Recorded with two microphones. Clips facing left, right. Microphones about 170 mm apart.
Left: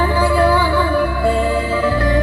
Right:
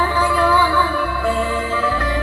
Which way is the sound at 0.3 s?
35° left (ahead or behind).